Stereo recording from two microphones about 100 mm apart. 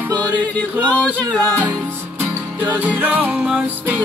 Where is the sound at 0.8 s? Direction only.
10° left (ahead or behind).